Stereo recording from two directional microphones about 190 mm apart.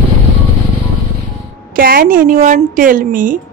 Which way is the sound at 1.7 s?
50° right (ahead or behind).